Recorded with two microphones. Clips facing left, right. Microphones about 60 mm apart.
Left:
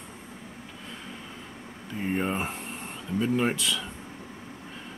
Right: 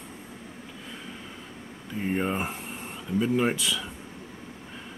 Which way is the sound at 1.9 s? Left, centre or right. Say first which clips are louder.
Right 1 dB; centre.